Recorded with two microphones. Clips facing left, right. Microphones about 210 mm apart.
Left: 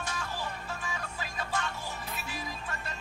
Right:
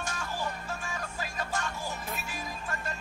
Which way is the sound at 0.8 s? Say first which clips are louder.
Right 1 dB; 45° right (ahead or behind).